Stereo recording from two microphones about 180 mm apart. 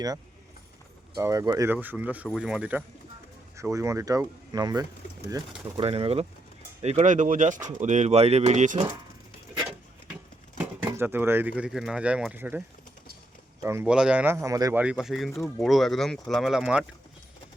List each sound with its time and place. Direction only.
1.1 s speech: 15° right (ahead or behind)
3.6 s speech: 15° right (ahead or behind); by 8.8 s 40° right (ahead or behind)
10.9 s speech: 10° right (ahead or behind)
14.8 s speech: 5° right (ahead or behind)